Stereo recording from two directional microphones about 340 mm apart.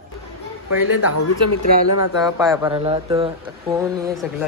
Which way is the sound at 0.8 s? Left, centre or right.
Left.